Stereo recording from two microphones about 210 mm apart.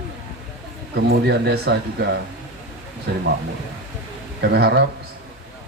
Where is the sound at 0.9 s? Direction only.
55° right (ahead or behind).